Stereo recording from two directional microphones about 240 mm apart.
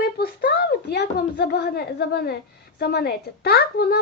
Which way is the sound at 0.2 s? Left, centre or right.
Left.